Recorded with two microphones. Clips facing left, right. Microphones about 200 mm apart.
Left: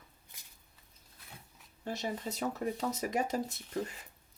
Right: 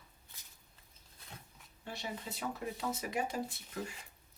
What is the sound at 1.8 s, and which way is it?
Speech, 40° left (ahead or behind).